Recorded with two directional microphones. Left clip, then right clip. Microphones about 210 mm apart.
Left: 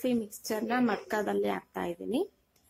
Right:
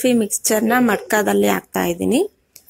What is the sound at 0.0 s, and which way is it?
Speech, 30° right (ahead or behind).